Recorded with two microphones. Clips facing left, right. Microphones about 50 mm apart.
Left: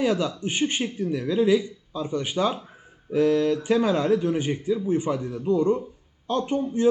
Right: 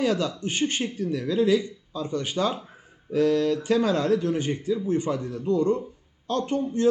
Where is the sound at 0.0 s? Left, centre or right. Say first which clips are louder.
Left 1 dB; centre.